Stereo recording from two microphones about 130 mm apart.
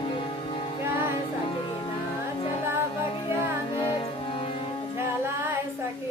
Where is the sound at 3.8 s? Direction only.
40° left (ahead or behind).